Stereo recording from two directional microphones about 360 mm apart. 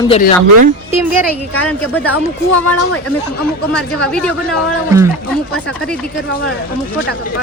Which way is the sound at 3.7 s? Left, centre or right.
Centre.